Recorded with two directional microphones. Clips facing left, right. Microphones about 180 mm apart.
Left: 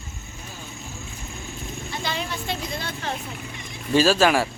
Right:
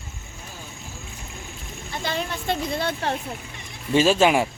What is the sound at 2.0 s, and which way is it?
A woman's voice, 50° right (ahead or behind).